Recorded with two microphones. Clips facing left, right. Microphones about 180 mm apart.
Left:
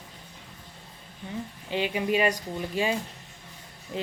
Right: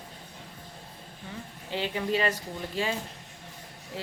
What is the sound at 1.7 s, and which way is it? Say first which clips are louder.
A woman's voice: left 3 dB; 15° left (ahead or behind).